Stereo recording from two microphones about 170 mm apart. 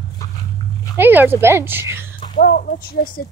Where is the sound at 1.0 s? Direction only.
10° right (ahead or behind).